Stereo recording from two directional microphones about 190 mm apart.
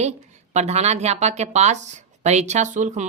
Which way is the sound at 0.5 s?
35° right (ahead or behind).